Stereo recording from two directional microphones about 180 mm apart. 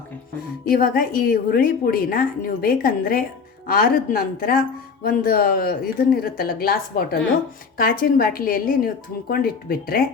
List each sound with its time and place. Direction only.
0.7 s a woman's voice: 55° left (ahead or behind)